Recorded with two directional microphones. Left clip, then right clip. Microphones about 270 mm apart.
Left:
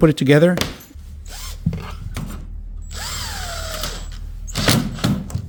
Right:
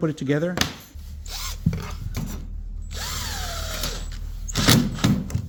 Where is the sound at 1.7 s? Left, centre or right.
Centre.